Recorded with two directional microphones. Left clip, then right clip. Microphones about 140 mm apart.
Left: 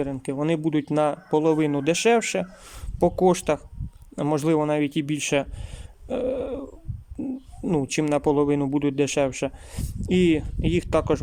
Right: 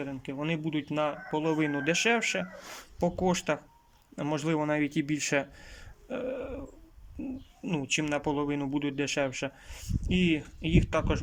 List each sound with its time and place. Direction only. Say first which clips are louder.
0.0 s speech: left 9 dB; 30° left (ahead or behind)
6.1 s dog: left 9 dB; 30° left (ahead or behind)
7.2 s speech: left 8 dB; 35° left (ahead or behind)